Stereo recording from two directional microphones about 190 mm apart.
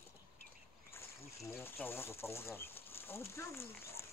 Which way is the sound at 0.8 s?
10° left (ahead or behind).